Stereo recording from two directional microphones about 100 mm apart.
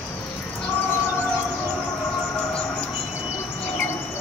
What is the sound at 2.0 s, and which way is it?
Siren, 10° left (ahead or behind).